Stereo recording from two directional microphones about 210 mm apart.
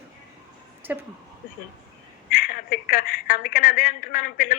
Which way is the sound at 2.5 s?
45° left (ahead or behind).